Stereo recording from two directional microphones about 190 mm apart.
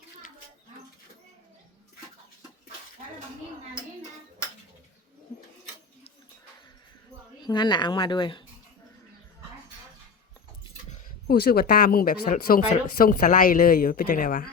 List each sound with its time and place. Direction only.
7.4 s speech: 25° left (ahead or behind)
11.3 s speech: 55° left (ahead or behind)